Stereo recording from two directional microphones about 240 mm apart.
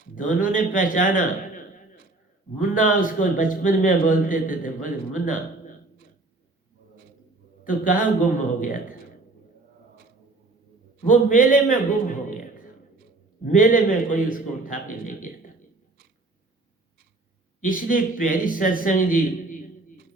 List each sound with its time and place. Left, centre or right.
0.2 s a man's voice: left
7.6 s a man's voice: left
11.0 s a man's voice: left
13.4 s a man's voice: left
17.6 s a man's voice: left